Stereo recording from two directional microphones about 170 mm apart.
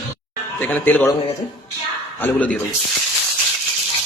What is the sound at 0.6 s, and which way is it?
Speech, 10° left (ahead or behind).